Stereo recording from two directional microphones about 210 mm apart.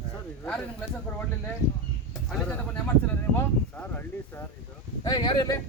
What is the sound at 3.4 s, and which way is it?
Speech, 10° left (ahead or behind).